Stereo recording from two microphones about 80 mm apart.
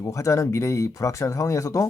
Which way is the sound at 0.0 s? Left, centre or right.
Left.